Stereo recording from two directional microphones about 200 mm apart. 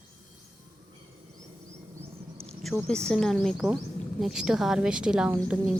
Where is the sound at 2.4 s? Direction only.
Centre (ahead or behind).